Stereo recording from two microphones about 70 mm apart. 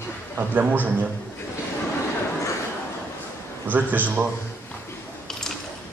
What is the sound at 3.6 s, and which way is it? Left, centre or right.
Speech, right.